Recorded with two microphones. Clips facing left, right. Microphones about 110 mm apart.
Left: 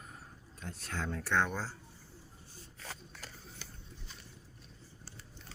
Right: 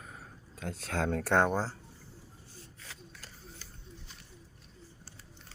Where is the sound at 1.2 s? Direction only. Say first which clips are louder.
Right 5 dB; 50° right (ahead or behind).